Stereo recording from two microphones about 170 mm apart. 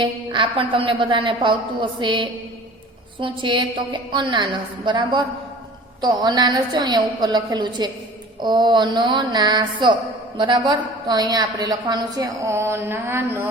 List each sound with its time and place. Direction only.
0.0 s speech: 30° right (ahead or behind)